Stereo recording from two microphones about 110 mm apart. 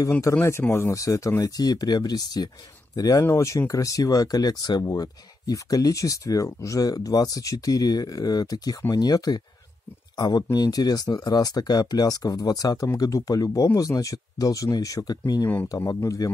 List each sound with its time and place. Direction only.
0.2 s speech: 25° left (ahead or behind)